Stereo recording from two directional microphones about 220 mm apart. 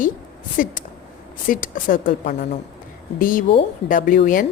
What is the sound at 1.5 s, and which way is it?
A woman's voice, 40° left (ahead or behind).